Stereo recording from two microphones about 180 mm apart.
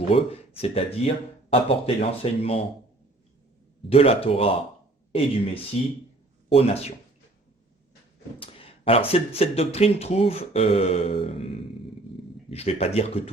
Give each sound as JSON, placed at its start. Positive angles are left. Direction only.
{"t": 0.1, "sound": "speech", "side_deg": 35}
{"t": 3.8, "sound": "speech", "side_deg": 35}
{"t": 8.4, "sound": "speech", "side_deg": 30}